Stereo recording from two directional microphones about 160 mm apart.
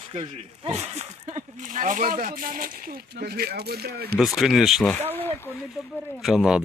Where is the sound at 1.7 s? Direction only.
55° right (ahead or behind); by 4.1 s 80° right.